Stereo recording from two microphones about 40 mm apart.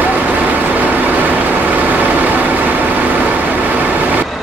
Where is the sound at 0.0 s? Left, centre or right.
Right.